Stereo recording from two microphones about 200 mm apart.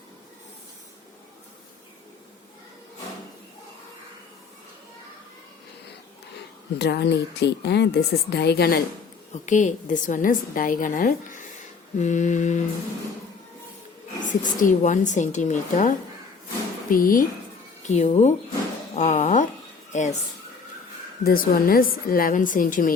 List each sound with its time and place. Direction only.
6.7 s speech: 55° left (ahead or behind)
9.3 s a woman's voice: 40° left (ahead or behind)
14.3 s a woman's voice: 40° left (ahead or behind)
21.2 s a woman's voice: 45° left (ahead or behind)